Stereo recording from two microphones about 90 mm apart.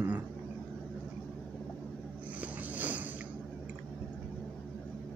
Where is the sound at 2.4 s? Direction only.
15° right (ahead or behind).